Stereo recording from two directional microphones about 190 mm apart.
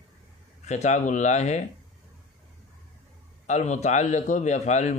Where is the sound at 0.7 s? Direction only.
35° left (ahead or behind).